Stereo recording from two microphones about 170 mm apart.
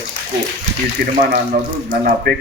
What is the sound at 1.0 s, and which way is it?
Speech, 70° right (ahead or behind).